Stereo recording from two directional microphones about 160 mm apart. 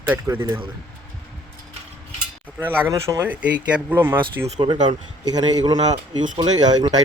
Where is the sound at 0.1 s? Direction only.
15° right (ahead or behind).